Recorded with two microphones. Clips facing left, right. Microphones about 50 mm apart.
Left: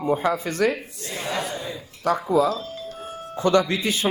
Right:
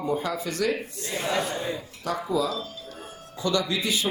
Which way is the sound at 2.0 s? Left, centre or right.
Left.